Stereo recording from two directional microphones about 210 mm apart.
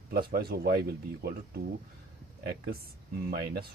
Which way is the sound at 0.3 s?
45° right (ahead or behind).